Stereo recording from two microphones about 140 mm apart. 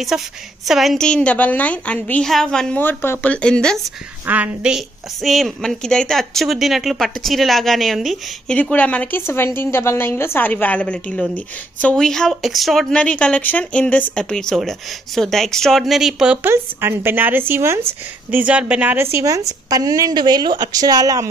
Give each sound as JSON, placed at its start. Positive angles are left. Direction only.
{"t": 0.1, "sound": "a woman's voice", "side_deg": -5}
{"t": 2.8, "sound": "a woman's voice", "side_deg": 15}
{"t": 4.3, "sound": "a woman's voice", "side_deg": -10}
{"t": 16.4, "sound": "a woman's voice", "side_deg": -15}